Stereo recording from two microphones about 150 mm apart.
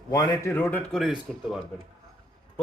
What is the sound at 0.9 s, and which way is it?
Speech, centre (ahead or behind).